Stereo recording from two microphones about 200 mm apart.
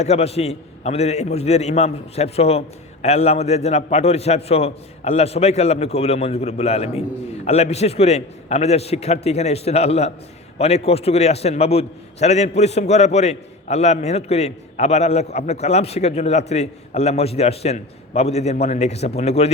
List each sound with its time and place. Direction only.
0.0 s a man's voice: 30° left (ahead or behind)